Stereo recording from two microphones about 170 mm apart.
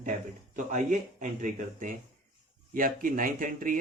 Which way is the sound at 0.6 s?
45° right (ahead or behind).